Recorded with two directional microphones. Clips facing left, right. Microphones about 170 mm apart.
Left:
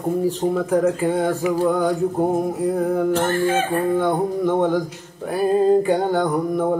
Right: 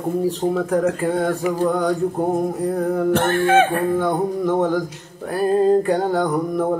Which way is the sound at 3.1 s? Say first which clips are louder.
Right 3 dB; 65° right (ahead or behind).